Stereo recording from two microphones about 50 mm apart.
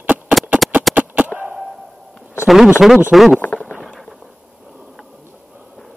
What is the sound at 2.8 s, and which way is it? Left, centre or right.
Speech, centre.